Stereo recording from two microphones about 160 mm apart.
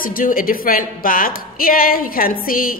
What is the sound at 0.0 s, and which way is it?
A woman's voice, 60° left (ahead or behind).